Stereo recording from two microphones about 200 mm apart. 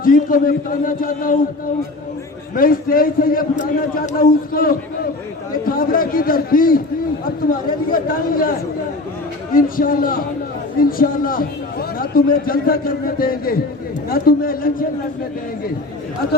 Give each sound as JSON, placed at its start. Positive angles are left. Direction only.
{"t": 0.0, "sound": "a man's voice", "side_deg": 45}
{"t": 2.6, "sound": "a man's voice", "side_deg": 45}